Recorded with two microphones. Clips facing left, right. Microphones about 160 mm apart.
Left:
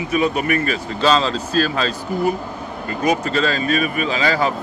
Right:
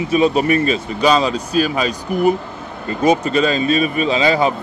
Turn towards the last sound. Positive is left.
turn(degrees=-20)  # may be behind; listen again after turning